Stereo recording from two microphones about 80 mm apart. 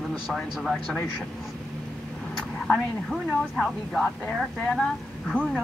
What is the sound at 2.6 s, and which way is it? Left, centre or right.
Speech, centre.